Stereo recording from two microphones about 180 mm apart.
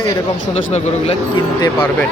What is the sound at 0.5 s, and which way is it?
Speech, 35° left (ahead or behind).